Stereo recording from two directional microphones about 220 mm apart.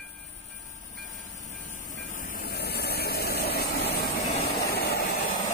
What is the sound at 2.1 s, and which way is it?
Vehicle, 40° left (ahead or behind).